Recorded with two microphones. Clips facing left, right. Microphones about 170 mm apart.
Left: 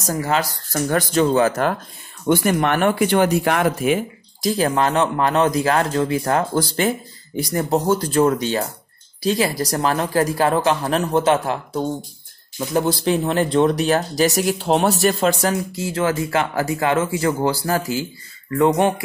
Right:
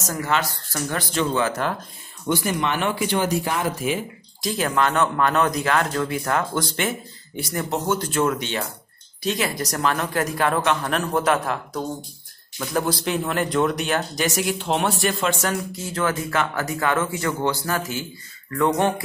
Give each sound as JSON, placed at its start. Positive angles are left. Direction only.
{"t": 0.0, "sound": "speech", "side_deg": 35}
{"t": 2.2, "sound": "speech", "side_deg": 55}
{"t": 4.6, "sound": "speech", "side_deg": 35}
{"t": 18.6, "sound": "speech", "side_deg": 20}